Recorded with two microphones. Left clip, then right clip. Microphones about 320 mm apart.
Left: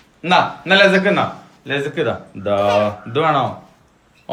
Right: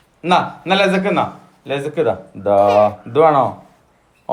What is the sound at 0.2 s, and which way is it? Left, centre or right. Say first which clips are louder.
Speech: left 1 dB; centre.